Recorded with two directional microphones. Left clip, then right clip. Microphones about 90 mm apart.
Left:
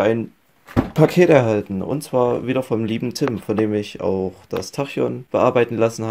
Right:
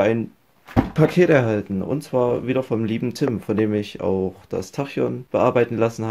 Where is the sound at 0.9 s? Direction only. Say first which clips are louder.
Left 3 dB; 35° left (ahead or behind).